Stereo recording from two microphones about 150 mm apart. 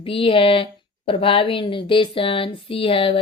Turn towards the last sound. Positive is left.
turn(degrees=35)  # may be behind; listen again after turning